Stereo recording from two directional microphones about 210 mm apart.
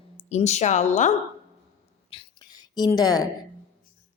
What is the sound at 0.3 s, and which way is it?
Speech, 30° left (ahead or behind).